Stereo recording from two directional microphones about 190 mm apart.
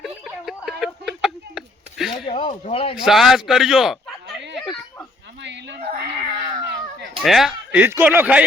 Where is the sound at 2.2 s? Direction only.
30° left (ahead or behind).